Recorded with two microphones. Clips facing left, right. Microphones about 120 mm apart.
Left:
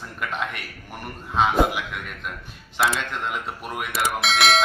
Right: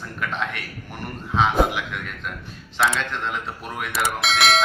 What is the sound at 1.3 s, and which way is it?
Bell, centre (ahead or behind).